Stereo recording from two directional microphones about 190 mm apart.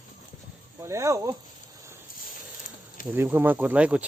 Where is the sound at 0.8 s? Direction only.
15° right (ahead or behind).